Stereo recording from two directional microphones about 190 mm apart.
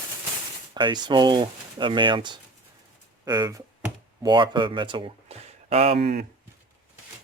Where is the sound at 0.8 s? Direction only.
25° right (ahead or behind).